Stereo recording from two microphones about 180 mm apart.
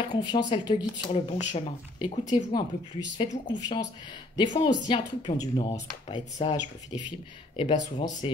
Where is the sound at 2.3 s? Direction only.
25° left (ahead or behind).